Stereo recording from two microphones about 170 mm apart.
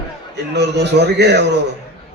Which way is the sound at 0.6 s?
80° right.